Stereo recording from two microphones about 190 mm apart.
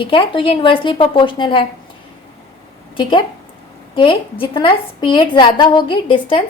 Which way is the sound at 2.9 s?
25° left (ahead or behind).